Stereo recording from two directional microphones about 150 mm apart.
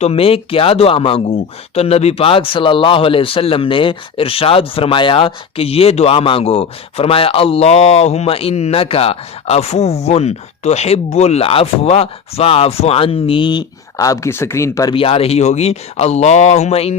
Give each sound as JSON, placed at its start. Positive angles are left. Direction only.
{"t": 0.0, "sound": "speech", "side_deg": 40}
{"t": 14.9, "sound": "speech", "side_deg": 40}